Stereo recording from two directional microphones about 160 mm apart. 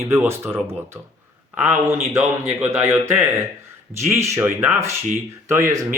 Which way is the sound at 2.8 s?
15° right (ahead or behind).